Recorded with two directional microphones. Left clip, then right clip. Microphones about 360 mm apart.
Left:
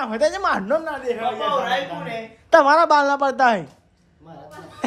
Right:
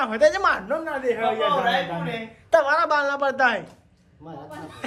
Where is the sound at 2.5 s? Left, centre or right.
Centre.